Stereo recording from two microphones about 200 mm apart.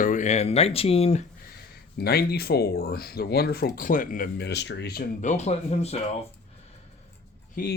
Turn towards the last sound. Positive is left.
turn(degrees=45)  # may be behind; listen again after turning